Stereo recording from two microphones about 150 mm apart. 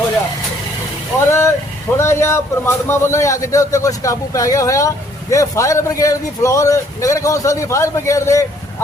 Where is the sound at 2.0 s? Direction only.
15° left (ahead or behind).